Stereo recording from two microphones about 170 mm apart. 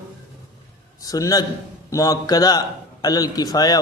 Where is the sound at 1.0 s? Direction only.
20° left (ahead or behind).